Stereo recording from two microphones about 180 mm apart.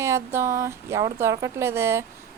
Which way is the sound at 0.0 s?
15° right (ahead or behind).